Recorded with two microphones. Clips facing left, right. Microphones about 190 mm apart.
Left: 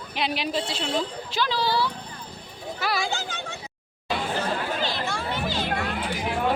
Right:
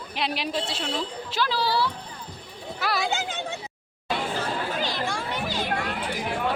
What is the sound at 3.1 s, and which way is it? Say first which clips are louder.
Speech: right 2 dB; 20° right (ahead or behind).